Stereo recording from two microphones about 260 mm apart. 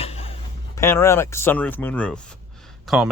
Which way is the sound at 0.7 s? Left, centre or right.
Centre.